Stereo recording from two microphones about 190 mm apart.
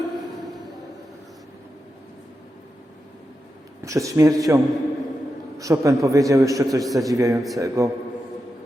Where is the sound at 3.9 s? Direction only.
15° right (ahead or behind).